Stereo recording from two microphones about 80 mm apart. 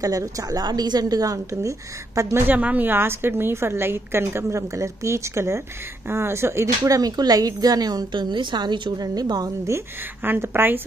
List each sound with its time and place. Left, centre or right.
0.0 s a woman's voice: right
2.4 s a woman's voice: right
7.0 s a woman's voice: right
8.9 s a woman's voice: right
9.7 s a woman's voice: right